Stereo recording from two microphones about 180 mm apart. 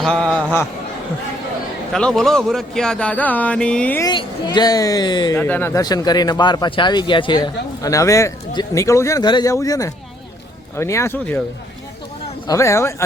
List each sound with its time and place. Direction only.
0.0 s speech: 5° left (ahead or behind)
1.9 s speech: 5° left (ahead or behind)
4.0 s speech: 25° left (ahead or behind)
5.4 s speech: 10° left (ahead or behind)
12.5 s speech: 15° left (ahead or behind)